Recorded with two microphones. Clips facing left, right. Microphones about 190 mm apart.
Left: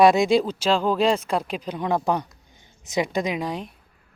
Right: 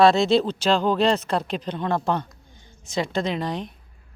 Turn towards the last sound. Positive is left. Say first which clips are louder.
# even
turn(degrees=10)  # may be behind; listen again after turning